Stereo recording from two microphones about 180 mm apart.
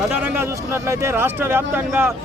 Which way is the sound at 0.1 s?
15° right (ahead or behind).